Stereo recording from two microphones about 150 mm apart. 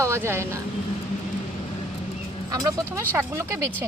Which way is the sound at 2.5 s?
25° right (ahead or behind).